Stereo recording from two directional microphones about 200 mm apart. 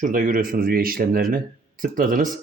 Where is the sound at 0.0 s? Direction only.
45° right (ahead or behind).